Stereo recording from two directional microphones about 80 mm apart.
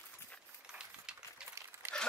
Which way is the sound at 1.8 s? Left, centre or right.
Right.